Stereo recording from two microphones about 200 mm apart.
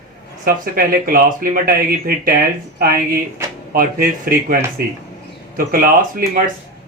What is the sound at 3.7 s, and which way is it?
Speech, 45° right (ahead or behind).